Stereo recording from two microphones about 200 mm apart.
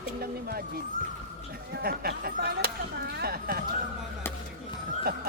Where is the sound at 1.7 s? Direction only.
50° right (ahead or behind).